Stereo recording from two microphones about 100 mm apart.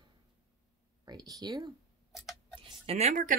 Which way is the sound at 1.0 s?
40° right (ahead or behind).